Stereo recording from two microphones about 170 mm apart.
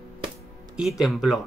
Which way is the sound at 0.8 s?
Centre (ahead or behind).